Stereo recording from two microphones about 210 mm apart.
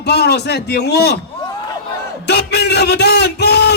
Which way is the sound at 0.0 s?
50° left (ahead or behind).